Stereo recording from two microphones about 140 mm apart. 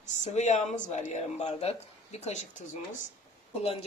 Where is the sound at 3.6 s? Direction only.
45° left (ahead or behind).